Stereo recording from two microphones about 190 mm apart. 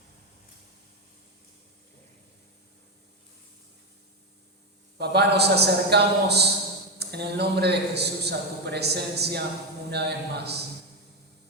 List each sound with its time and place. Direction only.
4.9 s a man's voice: 60° right (ahead or behind)